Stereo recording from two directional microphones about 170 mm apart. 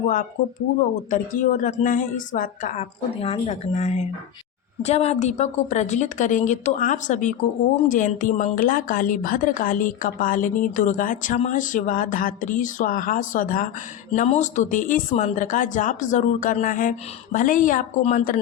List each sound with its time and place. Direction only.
1.1 s speech: 50° left (ahead or behind)
14.1 s speech: 40° left (ahead or behind)